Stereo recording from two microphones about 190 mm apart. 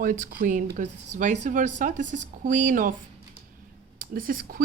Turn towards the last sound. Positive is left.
turn(degrees=-50)  # may be behind; listen again after turning